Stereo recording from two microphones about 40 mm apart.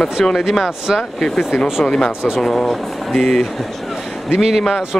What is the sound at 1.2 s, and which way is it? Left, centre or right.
Speech, centre.